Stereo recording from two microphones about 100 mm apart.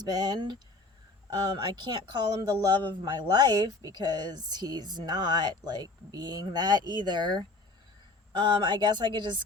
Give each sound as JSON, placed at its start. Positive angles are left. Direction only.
{"t": 0.0, "sound": "speech", "side_deg": -40}